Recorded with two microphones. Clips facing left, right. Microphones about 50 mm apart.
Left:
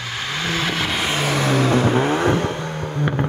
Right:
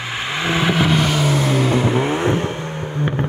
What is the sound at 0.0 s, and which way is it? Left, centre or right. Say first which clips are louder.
Vehicle: right 3 dB; right.